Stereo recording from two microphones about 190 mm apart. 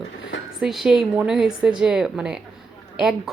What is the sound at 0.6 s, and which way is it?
Speech, centre (ahead or behind).